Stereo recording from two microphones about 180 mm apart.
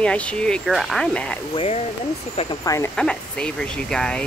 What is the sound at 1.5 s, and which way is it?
Speech, 35° left (ahead or behind).